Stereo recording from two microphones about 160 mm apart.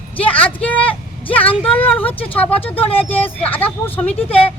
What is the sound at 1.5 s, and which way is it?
Speech, 35° left (ahead or behind).